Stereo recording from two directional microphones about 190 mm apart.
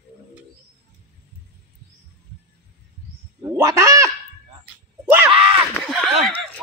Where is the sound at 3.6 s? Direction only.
15° right (ahead or behind).